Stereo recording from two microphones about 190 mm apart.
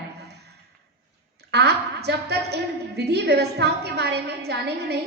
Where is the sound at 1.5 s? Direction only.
60° right (ahead or behind).